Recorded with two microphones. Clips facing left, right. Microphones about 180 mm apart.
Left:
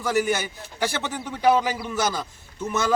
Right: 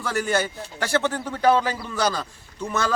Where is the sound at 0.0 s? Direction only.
15° left (ahead or behind).